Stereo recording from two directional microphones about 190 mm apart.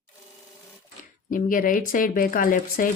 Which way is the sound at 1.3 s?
45° left (ahead or behind).